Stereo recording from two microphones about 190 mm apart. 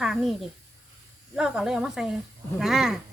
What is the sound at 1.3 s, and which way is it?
Speech, 5° right (ahead or behind).